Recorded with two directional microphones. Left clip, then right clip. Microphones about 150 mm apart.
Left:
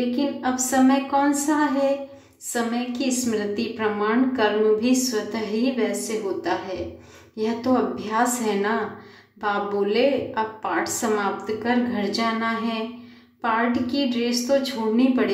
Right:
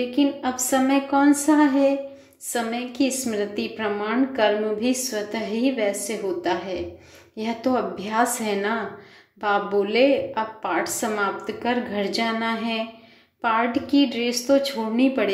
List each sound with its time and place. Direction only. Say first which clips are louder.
0.1 s a woman's voice: right 1 dB; 10° right (ahead or behind)